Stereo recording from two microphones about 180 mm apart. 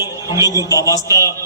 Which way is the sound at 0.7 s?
20° left (ahead or behind).